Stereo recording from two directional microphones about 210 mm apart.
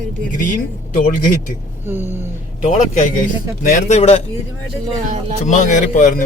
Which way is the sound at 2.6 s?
35° left (ahead or behind).